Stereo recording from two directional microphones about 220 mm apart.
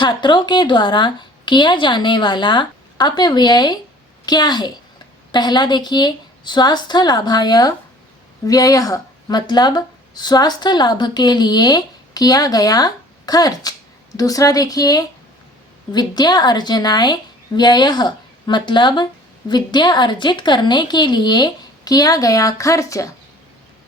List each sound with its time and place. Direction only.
0.0 s a woman's voice: 20° left (ahead or behind)